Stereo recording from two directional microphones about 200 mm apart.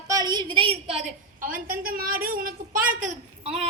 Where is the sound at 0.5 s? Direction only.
25° right (ahead or behind).